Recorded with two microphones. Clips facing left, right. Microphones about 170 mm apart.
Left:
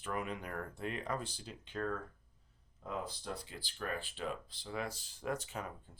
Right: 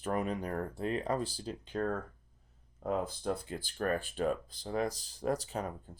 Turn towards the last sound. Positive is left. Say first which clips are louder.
# right 6 dB
turn(degrees=-35)  # may be behind; listen again after turning